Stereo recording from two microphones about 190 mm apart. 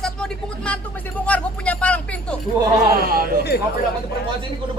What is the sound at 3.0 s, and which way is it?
Speech, 50° right (ahead or behind).